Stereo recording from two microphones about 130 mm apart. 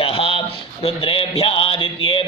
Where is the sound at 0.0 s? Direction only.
45° left (ahead or behind).